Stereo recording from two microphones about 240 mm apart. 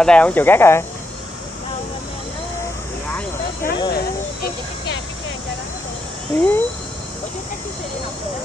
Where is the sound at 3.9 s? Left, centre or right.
Left.